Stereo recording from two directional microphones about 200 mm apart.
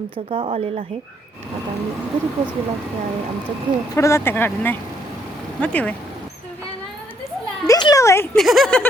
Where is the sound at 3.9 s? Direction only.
15° left (ahead or behind).